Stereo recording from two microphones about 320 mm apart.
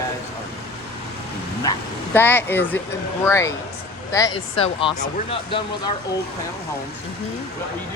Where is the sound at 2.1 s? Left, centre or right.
Centre.